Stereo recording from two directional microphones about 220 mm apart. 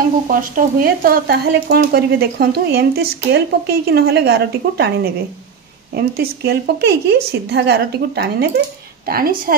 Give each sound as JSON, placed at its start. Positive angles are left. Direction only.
{"t": 0.3, "sound": "speech", "side_deg": -40}